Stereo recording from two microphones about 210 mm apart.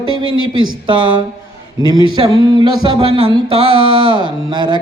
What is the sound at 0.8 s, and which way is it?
Mantra, 25° right (ahead or behind).